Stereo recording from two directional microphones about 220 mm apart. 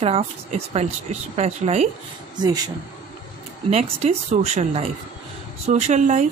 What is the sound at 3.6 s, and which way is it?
Speech, 30° right (ahead or behind).